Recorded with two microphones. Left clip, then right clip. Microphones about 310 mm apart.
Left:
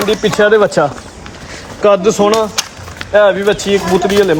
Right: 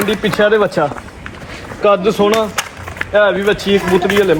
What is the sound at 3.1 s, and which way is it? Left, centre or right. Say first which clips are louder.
Speech: left 3 dB; left.